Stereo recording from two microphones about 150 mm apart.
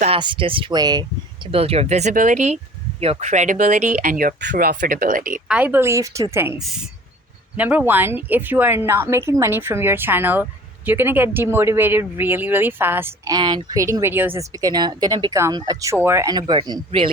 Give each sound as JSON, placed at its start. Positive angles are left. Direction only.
{"t": 0.2, "sound": "speech", "side_deg": -35}
{"t": 1.5, "sound": "speech", "side_deg": -40}
{"t": 5.5, "sound": "speech", "side_deg": -10}
{"t": 6.6, "sound": "speech", "side_deg": 0}
{"t": 13.3, "sound": "speech", "side_deg": -30}
{"t": 16.3, "sound": "speech", "side_deg": -30}